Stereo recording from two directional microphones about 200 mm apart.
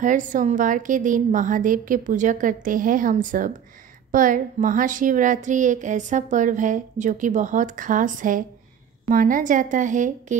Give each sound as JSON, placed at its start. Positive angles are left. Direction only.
{"t": 0.0, "sound": "a woman's voice", "side_deg": -40}